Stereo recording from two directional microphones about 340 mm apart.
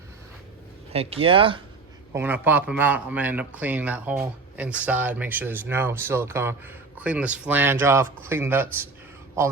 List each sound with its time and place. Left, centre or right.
0.9 s speech: centre